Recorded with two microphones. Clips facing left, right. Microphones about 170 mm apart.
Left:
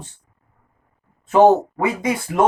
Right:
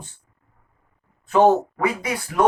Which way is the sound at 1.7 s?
25° left (ahead or behind).